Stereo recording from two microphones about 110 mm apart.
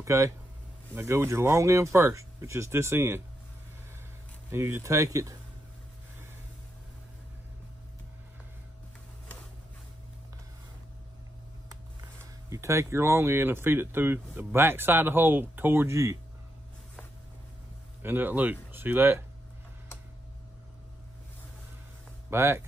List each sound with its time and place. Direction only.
0.0 s speech: 25° right (ahead or behind)
4.5 s speech: 20° right (ahead or behind)
12.2 s speech: 25° right (ahead or behind)
18.0 s speech: 15° right (ahead or behind)
22.3 s speech: 25° right (ahead or behind)